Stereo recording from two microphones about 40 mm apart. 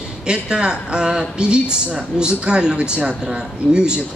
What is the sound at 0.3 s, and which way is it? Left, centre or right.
Speech, right.